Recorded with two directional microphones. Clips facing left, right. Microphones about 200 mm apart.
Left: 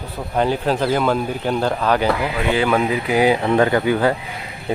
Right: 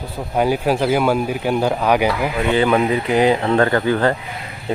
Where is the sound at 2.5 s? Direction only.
Centre (ahead or behind).